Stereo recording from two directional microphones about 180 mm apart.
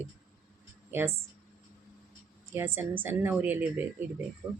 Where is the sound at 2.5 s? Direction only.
10° right (ahead or behind).